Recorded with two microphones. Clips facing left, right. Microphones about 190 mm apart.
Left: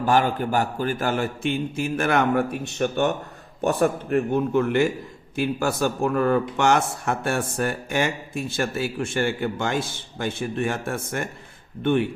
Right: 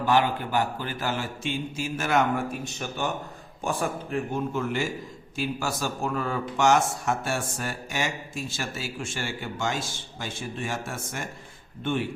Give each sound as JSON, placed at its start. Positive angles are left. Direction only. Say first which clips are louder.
{"t": 0.0, "sound": "speech", "louder": "left 3 dB", "side_deg": 45}